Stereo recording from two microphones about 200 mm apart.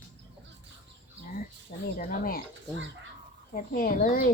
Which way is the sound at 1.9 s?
45° left (ahead or behind).